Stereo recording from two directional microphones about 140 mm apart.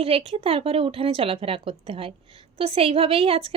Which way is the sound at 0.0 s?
45° right (ahead or behind).